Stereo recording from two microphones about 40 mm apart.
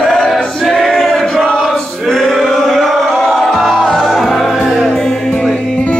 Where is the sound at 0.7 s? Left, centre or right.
Centre.